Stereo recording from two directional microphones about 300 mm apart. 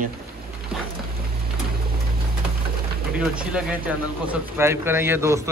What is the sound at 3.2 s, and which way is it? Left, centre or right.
Speech, centre.